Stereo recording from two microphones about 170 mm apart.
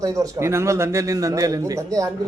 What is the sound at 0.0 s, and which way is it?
A man's voice, 20° right (ahead or behind).